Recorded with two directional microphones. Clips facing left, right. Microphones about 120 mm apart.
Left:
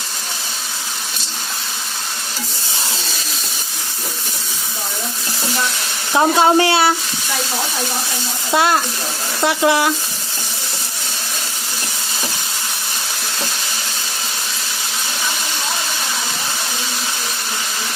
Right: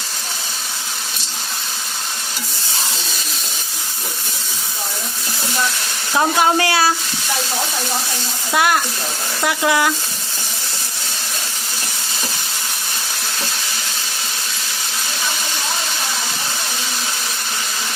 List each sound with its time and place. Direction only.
6.1 s speech: 25° left (ahead or behind)
8.5 s speech: 25° left (ahead or behind)